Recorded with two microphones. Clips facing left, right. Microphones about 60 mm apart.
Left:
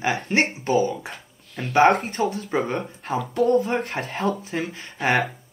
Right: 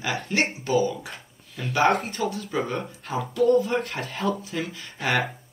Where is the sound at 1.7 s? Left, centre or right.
Left.